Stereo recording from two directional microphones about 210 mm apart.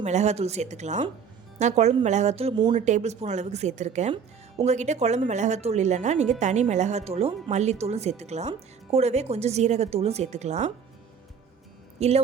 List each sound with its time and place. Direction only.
0.0 s speech: 35° right (ahead or behind)
11.9 s speech: 30° right (ahead or behind)